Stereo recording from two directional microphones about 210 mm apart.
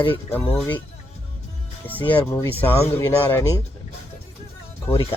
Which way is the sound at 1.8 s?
10° left (ahead or behind).